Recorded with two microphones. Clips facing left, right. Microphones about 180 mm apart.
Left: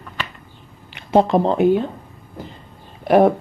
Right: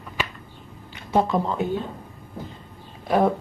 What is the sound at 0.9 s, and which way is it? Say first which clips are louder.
Speech: left 6 dB; 75° left (ahead or behind).